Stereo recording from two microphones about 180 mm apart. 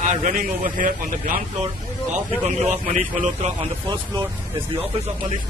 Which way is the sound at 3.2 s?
40° right (ahead or behind).